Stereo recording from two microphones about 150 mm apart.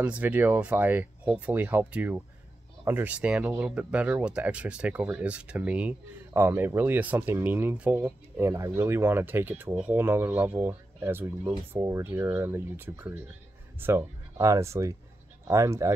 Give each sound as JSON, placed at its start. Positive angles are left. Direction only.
{"t": 0.0, "sound": "speech", "side_deg": -10}